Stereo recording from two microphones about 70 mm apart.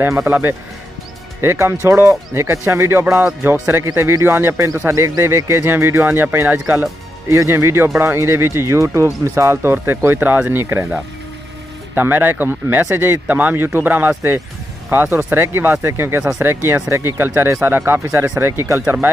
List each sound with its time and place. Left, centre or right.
0.3 s speech: right
3.8 s speech: right
11.9 s speech: right
18.3 s speech: right